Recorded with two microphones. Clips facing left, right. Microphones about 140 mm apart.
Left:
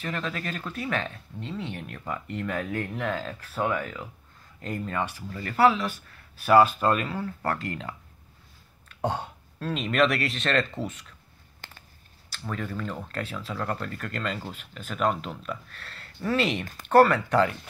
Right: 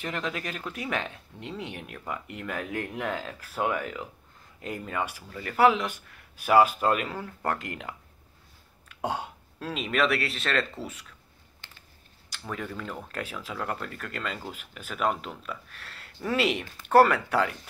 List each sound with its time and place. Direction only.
0.0 s speech: 15° right (ahead or behind)
11.6 s a sound: 45° left (ahead or behind)
12.3 s speech: 10° right (ahead or behind)